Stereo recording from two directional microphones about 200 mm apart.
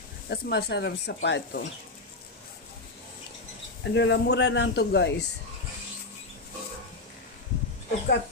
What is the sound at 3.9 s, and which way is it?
Speech, 60° left (ahead or behind).